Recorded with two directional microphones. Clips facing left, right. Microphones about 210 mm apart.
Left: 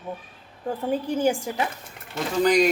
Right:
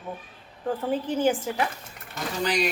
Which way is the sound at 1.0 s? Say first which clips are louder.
Even; 10° left (ahead or behind).